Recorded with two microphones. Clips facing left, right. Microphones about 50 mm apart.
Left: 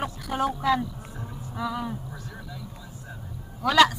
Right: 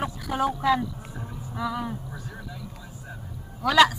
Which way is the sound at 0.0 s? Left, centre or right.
Centre.